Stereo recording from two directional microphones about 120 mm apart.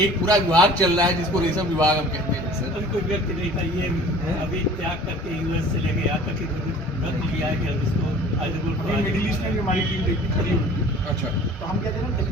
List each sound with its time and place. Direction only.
0.3 s a man's voice: 35° right (ahead or behind)